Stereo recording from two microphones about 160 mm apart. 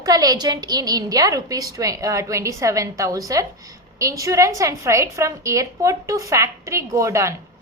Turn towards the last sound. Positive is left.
turn(degrees=-20)  # may be behind; listen again after turning